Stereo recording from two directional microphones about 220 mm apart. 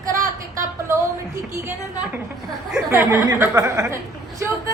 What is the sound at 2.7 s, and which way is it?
A man's voice, 10° right (ahead or behind).